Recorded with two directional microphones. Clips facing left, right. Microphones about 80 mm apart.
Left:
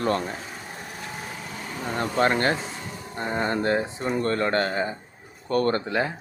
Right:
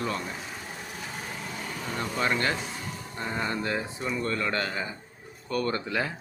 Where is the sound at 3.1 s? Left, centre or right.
Left.